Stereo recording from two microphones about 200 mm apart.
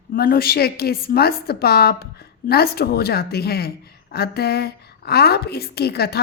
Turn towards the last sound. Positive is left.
turn(degrees=55)  # may be behind; listen again after turning